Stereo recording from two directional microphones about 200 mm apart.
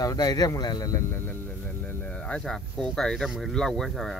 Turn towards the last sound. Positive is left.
turn(degrees=0)  # may be behind; listen again after turning